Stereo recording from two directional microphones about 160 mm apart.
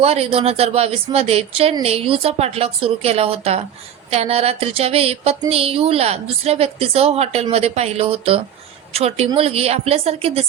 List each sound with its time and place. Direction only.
0.0 s a woman's voice: 40° right (ahead or behind)